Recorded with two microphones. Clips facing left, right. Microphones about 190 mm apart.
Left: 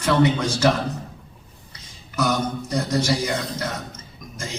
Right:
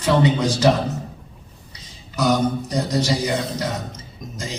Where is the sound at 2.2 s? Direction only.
15° right (ahead or behind).